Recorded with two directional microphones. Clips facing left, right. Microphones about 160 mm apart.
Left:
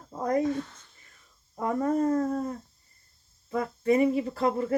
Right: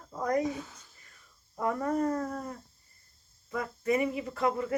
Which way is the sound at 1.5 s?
25° left (ahead or behind).